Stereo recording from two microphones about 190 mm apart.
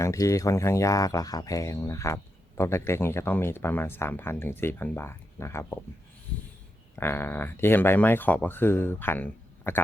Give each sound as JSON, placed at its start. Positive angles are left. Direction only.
{"t": 0.0, "sound": "speech", "side_deg": 15}
{"t": 6.9, "sound": "speech", "side_deg": 10}